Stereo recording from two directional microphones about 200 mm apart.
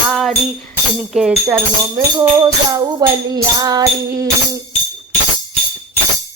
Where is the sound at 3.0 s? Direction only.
20° right (ahead or behind).